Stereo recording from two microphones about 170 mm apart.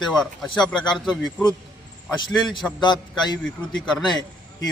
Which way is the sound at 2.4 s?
25° left (ahead or behind).